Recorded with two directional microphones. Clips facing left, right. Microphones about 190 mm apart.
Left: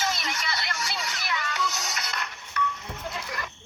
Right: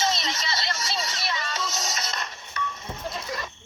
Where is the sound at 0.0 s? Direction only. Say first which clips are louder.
Right 3 dB; 20° right (ahead or behind).